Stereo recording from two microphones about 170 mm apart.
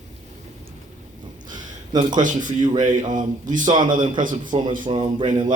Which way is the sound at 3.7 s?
25° right (ahead or behind).